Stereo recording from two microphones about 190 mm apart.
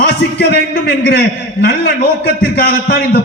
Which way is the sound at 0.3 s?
55° left (ahead or behind).